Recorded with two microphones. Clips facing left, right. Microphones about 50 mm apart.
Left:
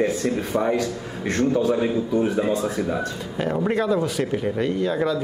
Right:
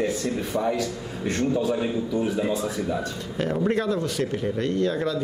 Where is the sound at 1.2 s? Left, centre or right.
Left.